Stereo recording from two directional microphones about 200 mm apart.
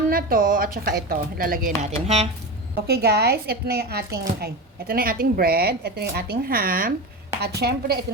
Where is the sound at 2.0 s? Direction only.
30° right (ahead or behind).